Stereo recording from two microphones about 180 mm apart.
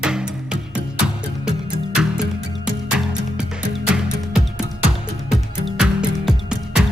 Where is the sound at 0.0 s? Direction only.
5° right (ahead or behind).